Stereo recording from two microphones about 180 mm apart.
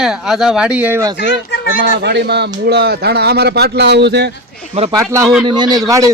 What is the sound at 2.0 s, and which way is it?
Speech, 70° right (ahead or behind).